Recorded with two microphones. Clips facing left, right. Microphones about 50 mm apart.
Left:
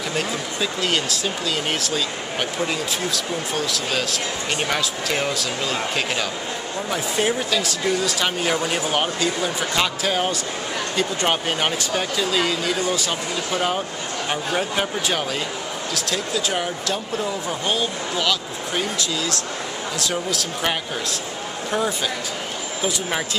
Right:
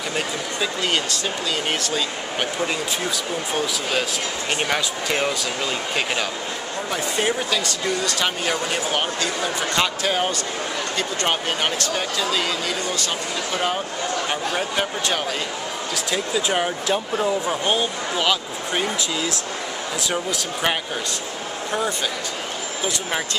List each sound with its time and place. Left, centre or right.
0.1 s speech: centre
16.3 s speech: centre